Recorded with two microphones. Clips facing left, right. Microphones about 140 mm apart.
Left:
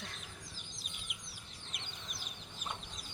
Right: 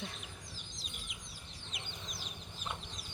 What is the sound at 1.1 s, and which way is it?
Chicken, 60° left (ahead or behind).